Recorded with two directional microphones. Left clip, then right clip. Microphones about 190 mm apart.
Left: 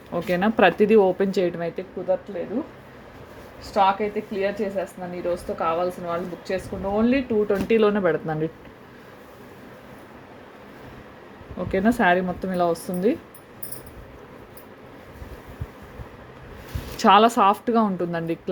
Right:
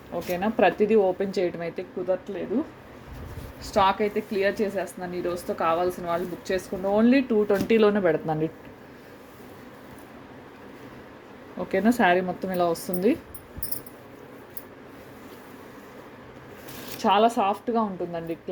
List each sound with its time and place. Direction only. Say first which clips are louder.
0.1 s speech: left 4 dB; 25° left (ahead or behind); by 1.8 s 10° left (ahead or behind)
3.6 s a woman's voice: left 2 dB; 15° right (ahead or behind); by 8.4 s centre (ahead or behind)
11.7 s a woman's voice: left 1 dB; centre (ahead or behind)
17.0 s speech: left 5 dB; 25° left (ahead or behind)